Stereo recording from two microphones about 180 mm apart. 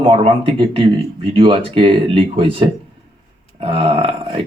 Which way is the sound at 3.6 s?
30° right (ahead or behind).